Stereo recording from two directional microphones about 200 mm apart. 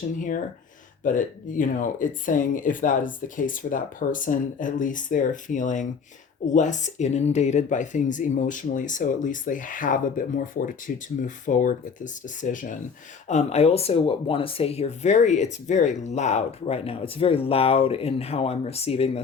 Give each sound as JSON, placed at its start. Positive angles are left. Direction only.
{"t": 1.0, "sound": "speech", "side_deg": 40}